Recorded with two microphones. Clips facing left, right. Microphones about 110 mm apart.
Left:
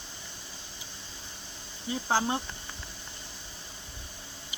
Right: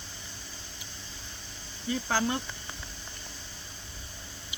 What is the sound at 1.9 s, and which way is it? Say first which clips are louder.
Speech: left 1 dB; 25° left (ahead or behind).